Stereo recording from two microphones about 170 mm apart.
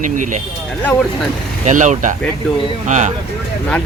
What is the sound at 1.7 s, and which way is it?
Speech, 45° right (ahead or behind).